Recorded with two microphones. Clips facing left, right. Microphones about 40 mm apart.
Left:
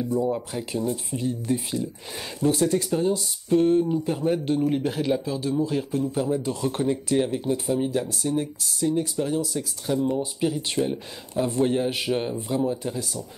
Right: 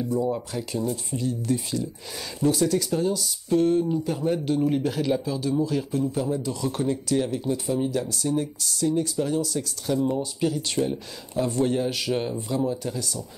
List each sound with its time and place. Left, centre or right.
0.1 s speech: centre
3.5 s speech: centre
4.6 s speech: centre
4.8 s speech: left
6.4 s speech: left
6.8 s speech: left